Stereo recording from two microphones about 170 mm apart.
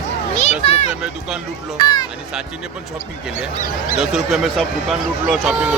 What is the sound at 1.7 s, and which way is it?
Speech, 25° left (ahead or behind).